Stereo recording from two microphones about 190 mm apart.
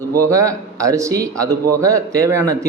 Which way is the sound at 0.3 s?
15° right (ahead or behind).